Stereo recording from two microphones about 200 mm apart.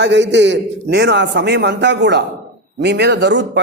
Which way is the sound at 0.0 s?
65° right (ahead or behind).